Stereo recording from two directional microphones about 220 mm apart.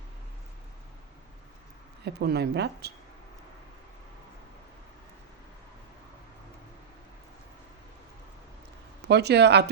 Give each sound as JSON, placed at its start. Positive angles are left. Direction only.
{"t": 2.0, "sound": "speech", "side_deg": -45}
{"t": 9.0, "sound": "speech", "side_deg": -50}